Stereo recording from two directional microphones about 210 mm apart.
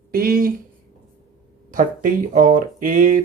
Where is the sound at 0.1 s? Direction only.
45° right (ahead or behind).